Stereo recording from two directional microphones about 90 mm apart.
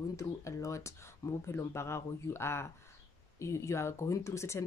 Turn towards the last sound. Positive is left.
turn(degrees=35)  # may be behind; listen again after turning